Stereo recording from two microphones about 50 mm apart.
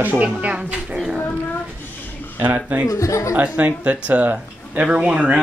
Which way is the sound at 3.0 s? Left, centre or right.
Left.